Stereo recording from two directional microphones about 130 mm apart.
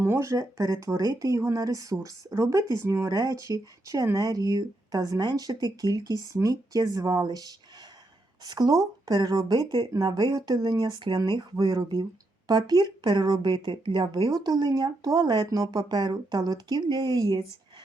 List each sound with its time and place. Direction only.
0.0 s speech: 20° right (ahead or behind)